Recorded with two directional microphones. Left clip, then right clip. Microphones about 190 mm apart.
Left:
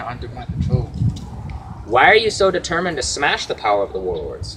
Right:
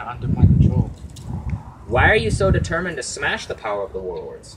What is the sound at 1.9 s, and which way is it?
Speech, 5° right (ahead or behind).